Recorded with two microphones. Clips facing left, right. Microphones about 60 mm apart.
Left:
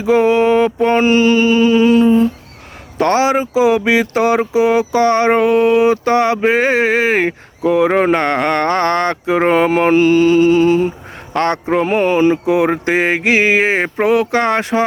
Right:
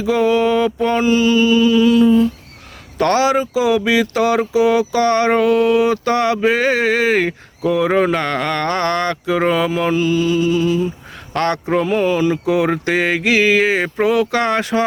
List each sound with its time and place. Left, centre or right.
0.0 s mantra: left
0.9 s mantra: left
3.0 s speech: left
8.4 s mantra: left
11.3 s speech: left
11.8 s mantra: left
12.5 s speech: centre